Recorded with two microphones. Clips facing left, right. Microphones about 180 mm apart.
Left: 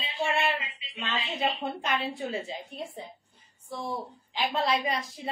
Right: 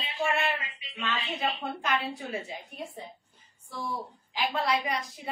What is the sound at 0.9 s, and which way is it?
A woman's voice, 25° left (ahead or behind).